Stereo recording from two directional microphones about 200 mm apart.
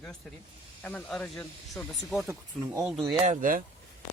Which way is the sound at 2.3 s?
15° right (ahead or behind).